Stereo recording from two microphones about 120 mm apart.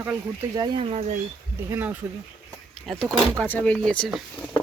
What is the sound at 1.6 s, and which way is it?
Speech, 15° right (ahead or behind).